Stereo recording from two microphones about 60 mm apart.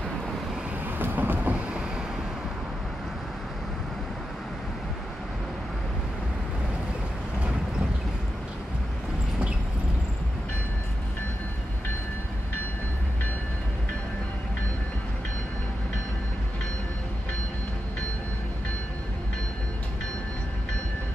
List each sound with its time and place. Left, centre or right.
0.8 s vehicle: right